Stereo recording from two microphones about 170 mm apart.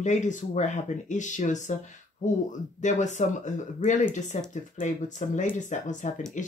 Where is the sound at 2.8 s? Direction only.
45° left (ahead or behind).